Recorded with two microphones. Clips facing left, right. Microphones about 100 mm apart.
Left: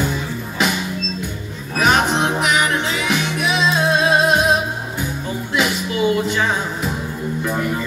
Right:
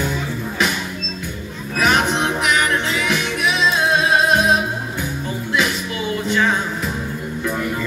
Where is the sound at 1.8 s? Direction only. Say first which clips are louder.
Left 1 dB; 30° left (ahead or behind).